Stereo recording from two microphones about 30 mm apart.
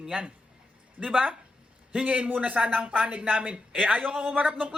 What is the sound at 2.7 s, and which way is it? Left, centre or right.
A woman's voice, right.